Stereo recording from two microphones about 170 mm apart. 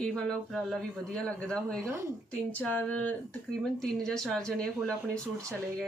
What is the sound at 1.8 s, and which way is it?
Speech, 15° right (ahead or behind).